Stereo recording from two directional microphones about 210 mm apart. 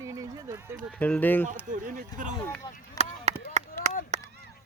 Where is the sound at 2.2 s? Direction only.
40° right (ahead or behind).